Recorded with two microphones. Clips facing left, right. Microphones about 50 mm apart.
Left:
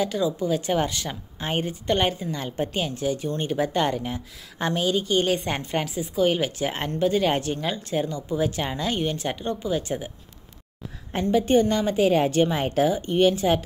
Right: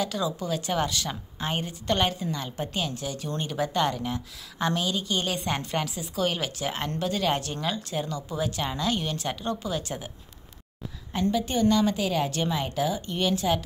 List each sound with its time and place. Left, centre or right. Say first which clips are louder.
0.0 s a woman's voice: left 4 dB; left
11.1 s a woman's voice: left 6 dB; left